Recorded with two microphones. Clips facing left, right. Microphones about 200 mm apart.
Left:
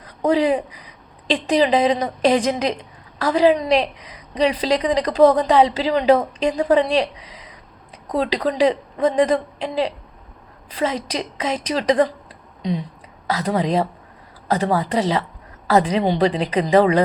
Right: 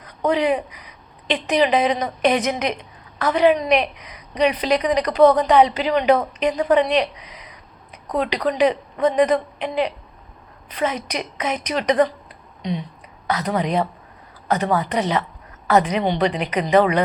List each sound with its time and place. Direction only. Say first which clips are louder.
0.0 s a sound: left 2 dB; 30° left (ahead or behind)
1.3 s a woman's voice: left 1 dB; 30° left (ahead or behind)
13.2 s a woman's voice: left 1 dB; 30° left (ahead or behind)